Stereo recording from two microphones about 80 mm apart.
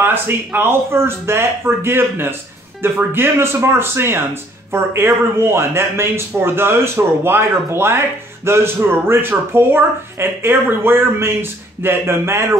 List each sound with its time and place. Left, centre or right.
0.0 s speech: right